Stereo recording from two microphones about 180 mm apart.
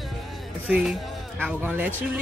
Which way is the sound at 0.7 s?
5° right (ahead or behind).